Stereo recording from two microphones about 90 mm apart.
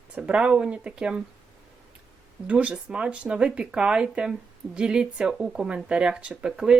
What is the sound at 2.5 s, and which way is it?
Speech, 15° right (ahead or behind).